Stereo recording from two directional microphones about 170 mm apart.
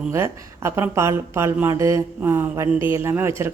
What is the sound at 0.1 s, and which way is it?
Speech, 15° right (ahead or behind).